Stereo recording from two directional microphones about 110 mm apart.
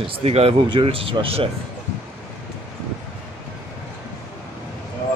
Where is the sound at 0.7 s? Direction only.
50° right (ahead or behind).